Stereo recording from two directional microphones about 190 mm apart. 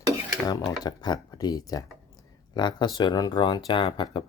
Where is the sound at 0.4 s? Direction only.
20° left (ahead or behind).